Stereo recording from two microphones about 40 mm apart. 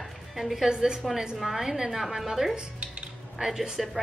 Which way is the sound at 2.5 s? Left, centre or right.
Right.